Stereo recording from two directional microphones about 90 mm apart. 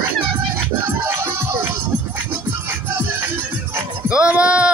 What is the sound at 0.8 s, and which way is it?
Music, 25° right (ahead or behind).